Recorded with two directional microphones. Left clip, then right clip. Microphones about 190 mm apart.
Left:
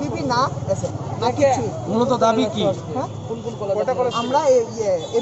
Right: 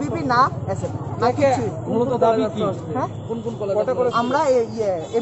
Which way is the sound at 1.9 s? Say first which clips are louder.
Left 1 dB; 15° left (ahead or behind).